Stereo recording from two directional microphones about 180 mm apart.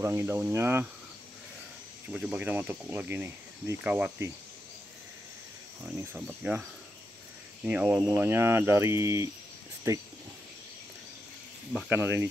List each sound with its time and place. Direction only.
0.0 s speech: 15° right (ahead or behind)
2.1 s speech: 5° right (ahead or behind)
6.1 s speech: 5° right (ahead or behind)
7.6 s speech: 10° right (ahead or behind)
11.9 s speech: 15° right (ahead or behind)